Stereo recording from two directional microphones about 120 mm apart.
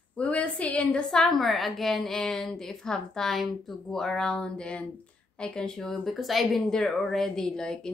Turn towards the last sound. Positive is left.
turn(degrees=5)  # may be behind; listen again after turning